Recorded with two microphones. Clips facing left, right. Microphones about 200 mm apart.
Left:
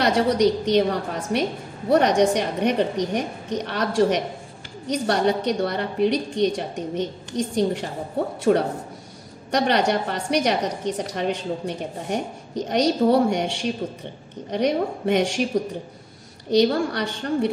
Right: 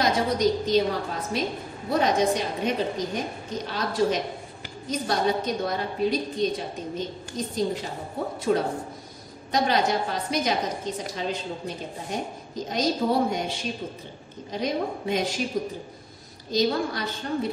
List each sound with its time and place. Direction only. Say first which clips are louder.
0.0 s a woman's voice: left 4 dB; 70° left (ahead or behind)
8.5 s a man's voice: left 5 dB; 55° left (ahead or behind)
9.5 s a woman's voice: left 3 dB; 70° left (ahead or behind)
16.4 s a woman's voice: left 5 dB; 70° left (ahead or behind)